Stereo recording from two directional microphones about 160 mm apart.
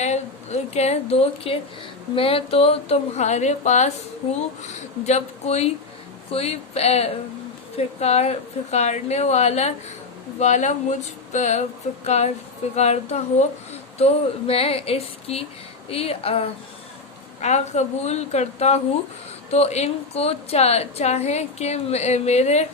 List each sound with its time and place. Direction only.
0.0 s a woman's voice: 45° left (ahead or behind)